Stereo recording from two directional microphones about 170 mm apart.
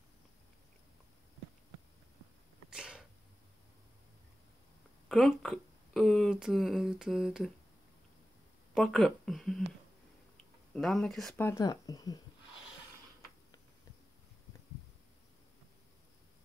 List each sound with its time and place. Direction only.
2.7 s sneeze: 5° right (ahead or behind)
5.0 s speech: centre (ahead or behind)
8.7 s speech: centre (ahead or behind)
10.3 s a sound: 5° left (ahead or behind)
11.3 s speech: 15° left (ahead or behind)